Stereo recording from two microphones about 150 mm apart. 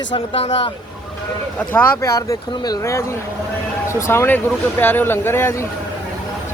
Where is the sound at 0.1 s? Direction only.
40° left (ahead or behind).